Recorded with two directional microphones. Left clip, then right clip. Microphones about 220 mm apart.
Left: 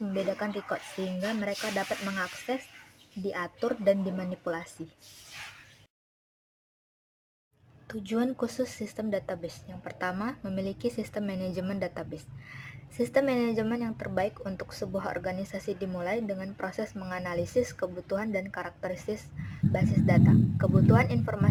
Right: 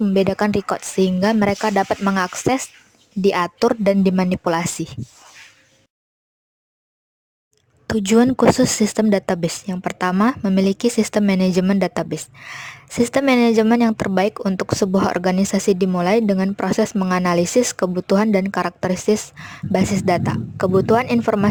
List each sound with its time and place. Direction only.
0.0 s speech: 50° right (ahead or behind)
7.9 s speech: 45° right (ahead or behind)